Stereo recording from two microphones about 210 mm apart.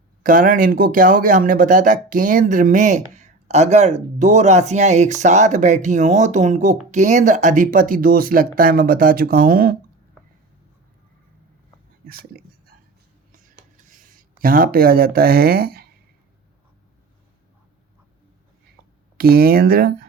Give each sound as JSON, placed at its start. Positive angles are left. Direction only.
{"t": 0.2, "sound": "speech", "side_deg": -40}
{"t": 12.0, "sound": "a sound", "side_deg": -45}
{"t": 19.1, "sound": "speech", "side_deg": -45}